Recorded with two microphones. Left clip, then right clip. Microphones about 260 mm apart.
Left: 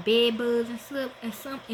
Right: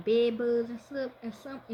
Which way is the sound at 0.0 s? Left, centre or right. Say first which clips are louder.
Left 3 dB; centre.